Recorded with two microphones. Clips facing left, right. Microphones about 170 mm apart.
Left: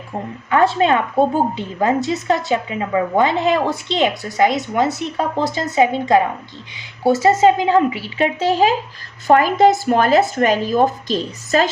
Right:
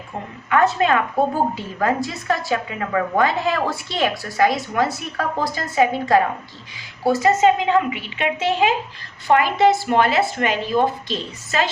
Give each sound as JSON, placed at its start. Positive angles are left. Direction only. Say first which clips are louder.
{"t": 0.5, "sound": "a woman's voice", "louder": "left 2 dB", "side_deg": 30}